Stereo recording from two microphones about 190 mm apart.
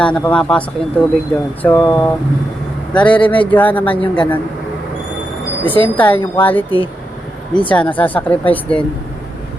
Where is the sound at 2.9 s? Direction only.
5° left (ahead or behind).